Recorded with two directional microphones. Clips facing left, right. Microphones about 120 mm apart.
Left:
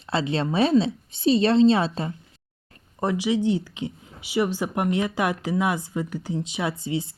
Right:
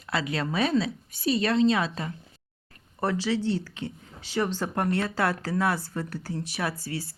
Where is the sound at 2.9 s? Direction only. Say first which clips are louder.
Left 3 dB; 15° left (ahead or behind).